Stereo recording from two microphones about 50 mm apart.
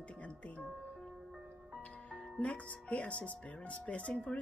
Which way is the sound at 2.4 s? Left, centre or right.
Left.